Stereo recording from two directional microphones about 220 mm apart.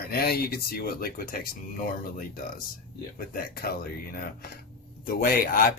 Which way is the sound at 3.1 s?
40° left (ahead or behind).